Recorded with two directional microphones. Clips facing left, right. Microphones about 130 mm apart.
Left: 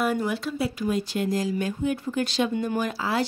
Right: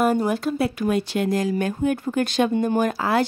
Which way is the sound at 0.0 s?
45° right (ahead or behind).